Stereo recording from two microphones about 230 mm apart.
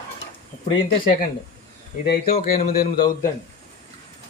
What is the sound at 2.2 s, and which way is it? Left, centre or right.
A man's voice, left.